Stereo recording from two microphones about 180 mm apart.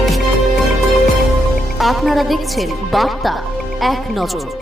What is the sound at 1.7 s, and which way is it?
A woman's voice, centre (ahead or behind).